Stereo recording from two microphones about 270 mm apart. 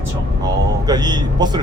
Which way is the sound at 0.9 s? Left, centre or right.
Centre.